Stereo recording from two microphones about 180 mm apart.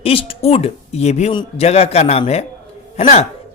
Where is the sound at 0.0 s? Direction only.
30° left (ahead or behind).